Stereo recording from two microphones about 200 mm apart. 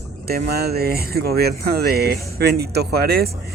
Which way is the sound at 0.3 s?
50° right (ahead or behind).